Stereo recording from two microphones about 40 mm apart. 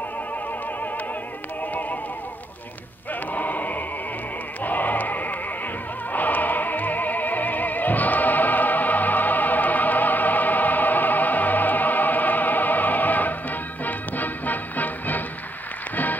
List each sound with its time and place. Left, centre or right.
1.7 s music: left
3.3 s a sound: left
4.6 s bleat: left
6.1 s music: left